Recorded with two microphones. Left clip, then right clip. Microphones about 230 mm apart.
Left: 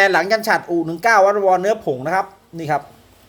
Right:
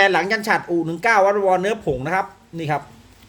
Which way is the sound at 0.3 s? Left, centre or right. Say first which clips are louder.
Left 3 dB; right.